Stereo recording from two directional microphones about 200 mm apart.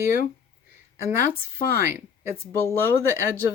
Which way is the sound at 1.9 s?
10° right (ahead or behind).